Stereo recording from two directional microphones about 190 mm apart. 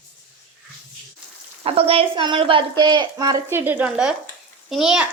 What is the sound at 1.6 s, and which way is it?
A woman's voice, 30° right (ahead or behind).